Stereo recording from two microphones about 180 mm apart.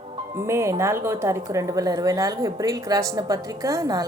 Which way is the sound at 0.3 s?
15° right (ahead or behind).